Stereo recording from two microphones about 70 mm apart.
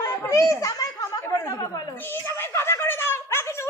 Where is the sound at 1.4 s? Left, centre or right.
Left.